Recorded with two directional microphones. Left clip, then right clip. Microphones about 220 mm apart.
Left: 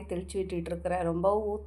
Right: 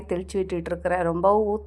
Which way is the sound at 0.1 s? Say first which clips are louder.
Right 7 dB; 30° right (ahead or behind).